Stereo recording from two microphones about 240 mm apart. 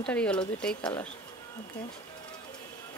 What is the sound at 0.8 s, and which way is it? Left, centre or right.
Speech, centre.